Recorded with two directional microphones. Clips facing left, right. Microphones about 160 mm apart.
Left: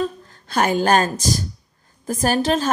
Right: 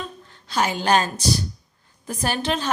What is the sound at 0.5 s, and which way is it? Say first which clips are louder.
A woman's voice: left 3 dB; 55° left (ahead or behind).